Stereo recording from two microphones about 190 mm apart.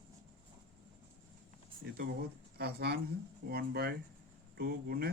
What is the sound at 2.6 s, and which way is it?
Speech, 60° right (ahead or behind).